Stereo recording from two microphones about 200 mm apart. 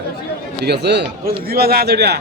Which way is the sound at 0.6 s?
55° right (ahead or behind).